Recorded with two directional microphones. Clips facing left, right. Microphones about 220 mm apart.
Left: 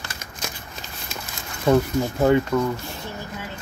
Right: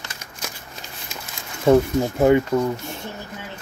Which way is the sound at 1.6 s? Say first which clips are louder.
Right 3 dB; 25° right (ahead or behind).